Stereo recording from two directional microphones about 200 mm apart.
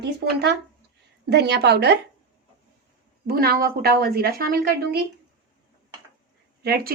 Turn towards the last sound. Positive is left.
turn(degrees=-50)  # may be behind; listen again after turning